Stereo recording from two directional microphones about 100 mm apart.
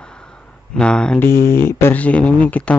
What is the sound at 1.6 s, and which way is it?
Speech, 20° left (ahead or behind).